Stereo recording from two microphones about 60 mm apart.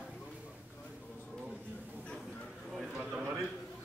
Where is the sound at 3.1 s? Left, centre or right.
Right.